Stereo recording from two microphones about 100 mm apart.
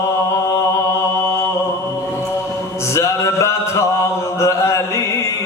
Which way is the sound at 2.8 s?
30° left (ahead or behind).